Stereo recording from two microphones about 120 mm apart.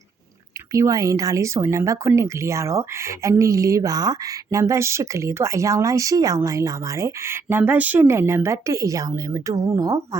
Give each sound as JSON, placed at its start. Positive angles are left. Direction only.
{"t": 0.7, "sound": "speech", "side_deg": -30}